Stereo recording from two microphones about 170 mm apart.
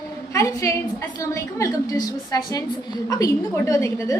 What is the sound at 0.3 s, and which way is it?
A woman's voice, 20° left (ahead or behind).